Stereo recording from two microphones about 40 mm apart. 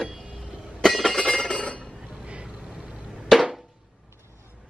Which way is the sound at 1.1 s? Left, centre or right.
Centre.